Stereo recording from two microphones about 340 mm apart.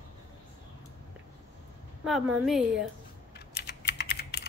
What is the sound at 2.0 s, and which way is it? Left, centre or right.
Speech, centre.